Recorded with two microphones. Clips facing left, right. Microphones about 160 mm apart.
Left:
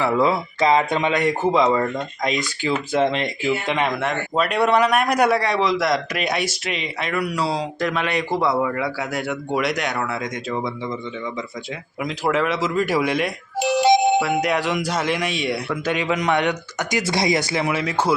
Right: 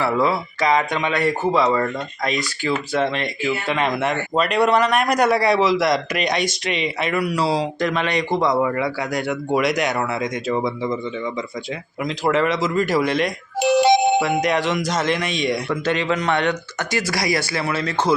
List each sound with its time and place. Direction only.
0.0 s speech: 15° left (ahead or behind)
1.1 s speech: 15° left (ahead or behind)
3.8 s speech: centre (ahead or behind)
5.4 s speech: 5° right (ahead or behind)
12.0 s speech: 5° left (ahead or behind)
13.6 s music: 65° right (ahead or behind)
14.2 s speech: 5° left (ahead or behind)